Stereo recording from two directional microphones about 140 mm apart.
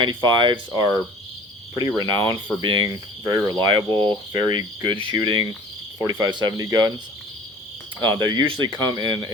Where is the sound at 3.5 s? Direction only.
30° right (ahead or behind).